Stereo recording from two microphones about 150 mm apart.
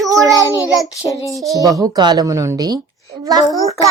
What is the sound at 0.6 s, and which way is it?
Child singing, 20° left (ahead or behind).